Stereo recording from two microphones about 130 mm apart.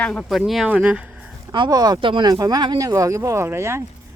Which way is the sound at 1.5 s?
35° right (ahead or behind).